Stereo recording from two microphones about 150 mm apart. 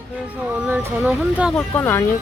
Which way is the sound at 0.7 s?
10° right (ahead or behind).